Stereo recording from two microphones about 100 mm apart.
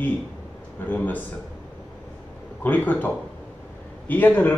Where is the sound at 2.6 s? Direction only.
15° left (ahead or behind).